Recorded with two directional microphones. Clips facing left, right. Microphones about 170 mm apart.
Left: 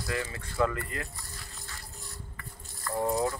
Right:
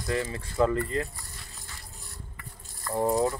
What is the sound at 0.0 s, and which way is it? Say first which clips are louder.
Speech: right 4 dB; 30° right (ahead or behind).